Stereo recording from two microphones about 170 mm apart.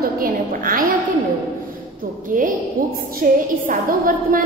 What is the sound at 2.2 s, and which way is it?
A woman's voice, 50° right (ahead or behind).